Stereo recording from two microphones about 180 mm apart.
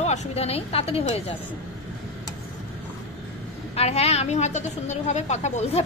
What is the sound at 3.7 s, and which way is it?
A woman's voice, 35° left (ahead or behind).